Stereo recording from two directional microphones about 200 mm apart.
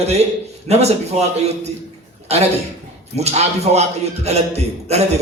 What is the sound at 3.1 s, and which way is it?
A man's voice, 30° right (ahead or behind).